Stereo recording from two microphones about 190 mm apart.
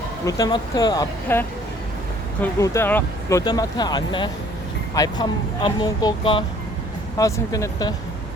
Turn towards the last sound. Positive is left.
turn(degrees=20)  # may be behind; listen again after turning